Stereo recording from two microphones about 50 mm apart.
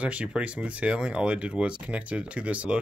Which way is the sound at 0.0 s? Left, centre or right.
Right.